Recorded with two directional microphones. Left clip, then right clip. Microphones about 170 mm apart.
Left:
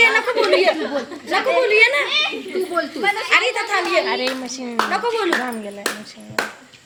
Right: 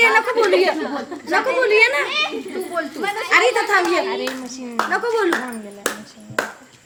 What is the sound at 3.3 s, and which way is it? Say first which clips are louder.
Speech: right 5 dB; 75° right (ahead or behind).